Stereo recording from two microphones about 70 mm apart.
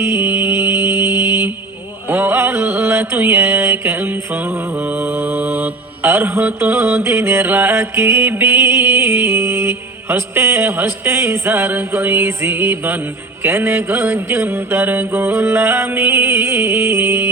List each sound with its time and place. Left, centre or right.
0.0 s music: right
2.0 s mantra: right